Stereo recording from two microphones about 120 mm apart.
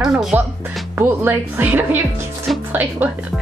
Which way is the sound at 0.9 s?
20° right (ahead or behind).